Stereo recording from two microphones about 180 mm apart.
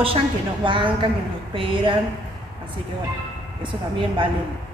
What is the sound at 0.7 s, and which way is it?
A woman's voice, 25° right (ahead or behind).